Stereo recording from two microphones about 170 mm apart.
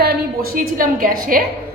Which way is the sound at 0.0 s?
60° right (ahead or behind).